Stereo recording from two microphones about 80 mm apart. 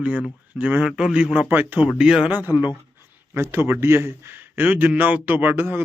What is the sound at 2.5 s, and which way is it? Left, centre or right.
Speech, left.